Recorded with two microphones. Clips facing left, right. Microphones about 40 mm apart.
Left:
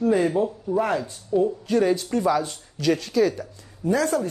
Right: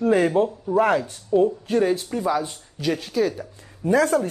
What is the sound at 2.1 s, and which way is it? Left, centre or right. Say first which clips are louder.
Speech: left 2 dB; centre.